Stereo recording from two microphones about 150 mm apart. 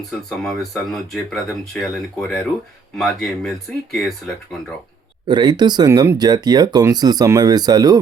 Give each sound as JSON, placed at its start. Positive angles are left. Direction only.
{"t": 0.3, "sound": "speech", "side_deg": 5}
{"t": 5.3, "sound": "speech", "side_deg": -30}